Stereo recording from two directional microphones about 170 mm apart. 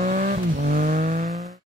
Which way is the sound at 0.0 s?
50° right (ahead or behind).